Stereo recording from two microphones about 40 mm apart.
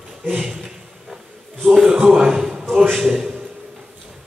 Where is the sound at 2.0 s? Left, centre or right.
Centre.